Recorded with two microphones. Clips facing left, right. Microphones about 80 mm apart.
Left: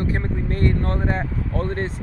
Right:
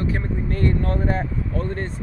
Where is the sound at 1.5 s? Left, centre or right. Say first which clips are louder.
Left 3 dB; left.